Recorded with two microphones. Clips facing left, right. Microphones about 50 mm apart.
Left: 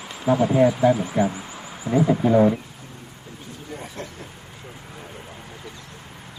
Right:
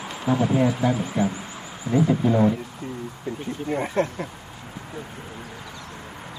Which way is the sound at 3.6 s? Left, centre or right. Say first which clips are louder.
Right 12 dB; right.